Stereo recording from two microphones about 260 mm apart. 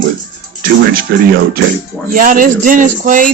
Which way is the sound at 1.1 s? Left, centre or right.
Right.